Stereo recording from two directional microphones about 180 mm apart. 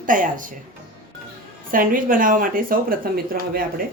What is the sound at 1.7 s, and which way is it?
Speech, 50° right (ahead or behind).